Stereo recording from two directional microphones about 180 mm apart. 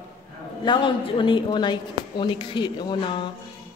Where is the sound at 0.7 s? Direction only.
30° left (ahead or behind).